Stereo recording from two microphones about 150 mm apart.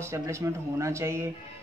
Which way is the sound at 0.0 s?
20° right (ahead or behind).